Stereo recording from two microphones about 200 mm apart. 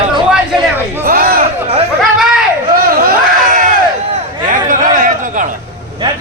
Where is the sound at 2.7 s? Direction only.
45° right (ahead or behind).